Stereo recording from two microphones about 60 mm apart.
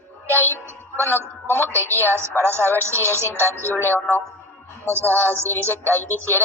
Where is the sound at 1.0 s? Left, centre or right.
Right.